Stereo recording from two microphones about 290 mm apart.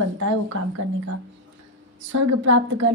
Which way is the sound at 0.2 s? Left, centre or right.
Right.